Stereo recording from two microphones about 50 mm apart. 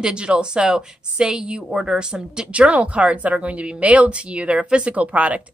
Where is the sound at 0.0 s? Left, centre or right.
Centre.